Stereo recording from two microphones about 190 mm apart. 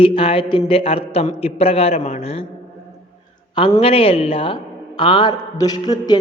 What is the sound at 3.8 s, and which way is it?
A man's voice, 30° left (ahead or behind).